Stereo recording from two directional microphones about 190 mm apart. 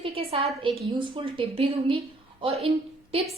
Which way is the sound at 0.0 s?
30° right (ahead or behind).